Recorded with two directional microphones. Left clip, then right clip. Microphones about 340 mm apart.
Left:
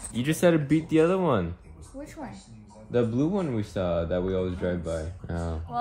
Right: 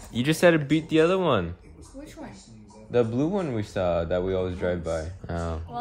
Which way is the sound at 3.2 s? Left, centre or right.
Centre.